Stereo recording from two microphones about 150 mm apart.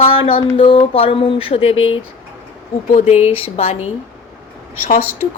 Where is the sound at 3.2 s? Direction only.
40° left (ahead or behind).